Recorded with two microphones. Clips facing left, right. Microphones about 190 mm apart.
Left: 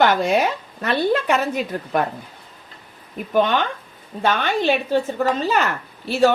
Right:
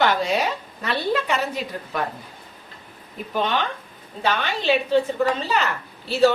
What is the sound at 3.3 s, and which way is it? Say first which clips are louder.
A woman's voice: left 5 dB; 50° left (ahead or behind).